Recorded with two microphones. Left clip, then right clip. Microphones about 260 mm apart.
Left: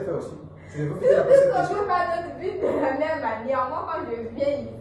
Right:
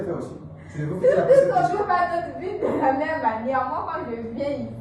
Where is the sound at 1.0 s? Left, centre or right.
Right.